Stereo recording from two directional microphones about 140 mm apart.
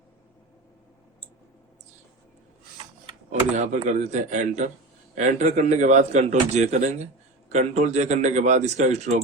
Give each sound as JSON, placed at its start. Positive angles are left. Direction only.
{"t": 3.5, "sound": "speech", "side_deg": -55}